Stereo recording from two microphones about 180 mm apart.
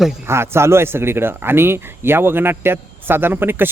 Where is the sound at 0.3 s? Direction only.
15° right (ahead or behind).